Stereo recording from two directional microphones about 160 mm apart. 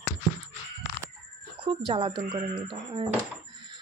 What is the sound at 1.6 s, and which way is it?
Speech, 35° right (ahead or behind).